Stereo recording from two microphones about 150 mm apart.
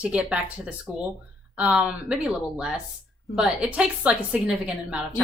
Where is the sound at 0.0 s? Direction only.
10° right (ahead or behind).